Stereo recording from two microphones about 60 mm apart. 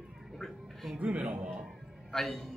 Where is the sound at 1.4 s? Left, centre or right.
Centre.